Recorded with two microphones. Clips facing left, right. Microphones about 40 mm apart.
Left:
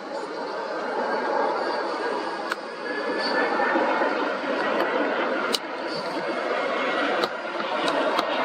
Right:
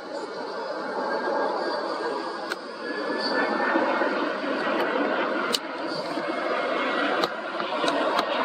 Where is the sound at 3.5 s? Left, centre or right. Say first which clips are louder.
Left 1 dB; centre.